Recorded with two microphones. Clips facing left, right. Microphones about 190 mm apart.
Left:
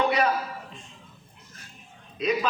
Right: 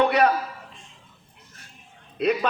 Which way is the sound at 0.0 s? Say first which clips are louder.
Right 4 dB; 60° right (ahead or behind).